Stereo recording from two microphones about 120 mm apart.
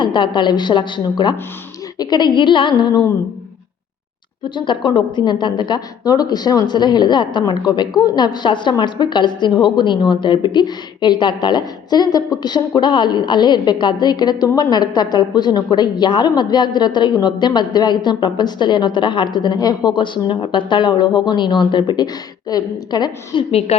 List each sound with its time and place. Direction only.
0.0 s a woman's voice: 40° left (ahead or behind)
4.4 s a woman's voice: 40° left (ahead or behind); by 23.7 s 55° left (ahead or behind)